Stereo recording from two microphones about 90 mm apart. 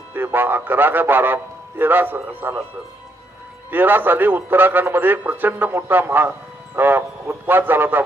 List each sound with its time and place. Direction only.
0.1 s a man's voice: 25° right (ahead or behind)
3.7 s a man's voice: 20° right (ahead or behind)